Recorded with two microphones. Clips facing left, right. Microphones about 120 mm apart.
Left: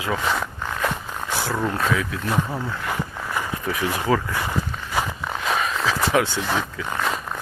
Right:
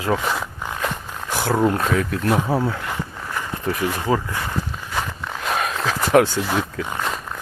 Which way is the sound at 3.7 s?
40° right (ahead or behind).